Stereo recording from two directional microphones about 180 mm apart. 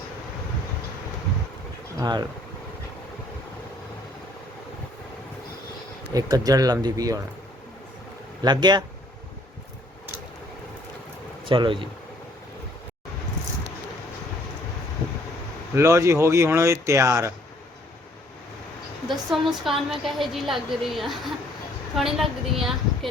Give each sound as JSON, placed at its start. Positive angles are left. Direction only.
{"t": 2.0, "sound": "speech", "side_deg": -25}
{"t": 6.1, "sound": "speech", "side_deg": -20}
{"t": 8.4, "sound": "speech", "side_deg": -25}
{"t": 11.4, "sound": "speech", "side_deg": -25}
{"t": 15.7, "sound": "speech", "side_deg": -15}
{"t": 19.0, "sound": "a woman's voice", "side_deg": 0}